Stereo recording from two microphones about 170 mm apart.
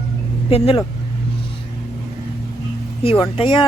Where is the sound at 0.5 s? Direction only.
35° left (ahead or behind).